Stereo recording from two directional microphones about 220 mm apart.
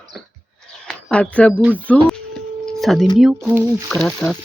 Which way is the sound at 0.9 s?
5° left (ahead or behind).